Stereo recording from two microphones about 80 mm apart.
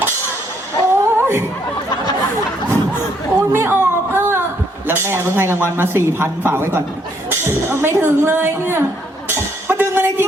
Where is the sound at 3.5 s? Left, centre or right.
Right.